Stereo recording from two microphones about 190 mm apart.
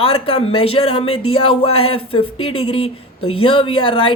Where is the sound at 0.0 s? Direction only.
30° left (ahead or behind).